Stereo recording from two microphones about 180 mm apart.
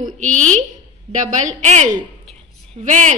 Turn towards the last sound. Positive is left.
turn(degrees=-45)  # may be behind; listen again after turning